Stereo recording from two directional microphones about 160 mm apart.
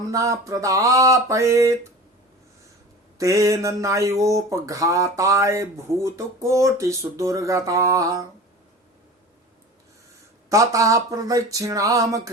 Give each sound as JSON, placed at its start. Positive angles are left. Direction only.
{"t": 0.1, "sound": "mantra", "side_deg": -20}
{"t": 3.2, "sound": "mantra", "side_deg": -20}
{"t": 10.5, "sound": "mantra", "side_deg": -20}